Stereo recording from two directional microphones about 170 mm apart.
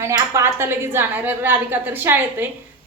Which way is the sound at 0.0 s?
15° right (ahead or behind).